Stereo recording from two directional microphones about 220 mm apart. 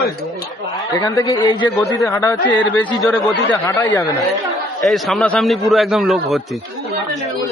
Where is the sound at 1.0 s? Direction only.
15° left (ahead or behind).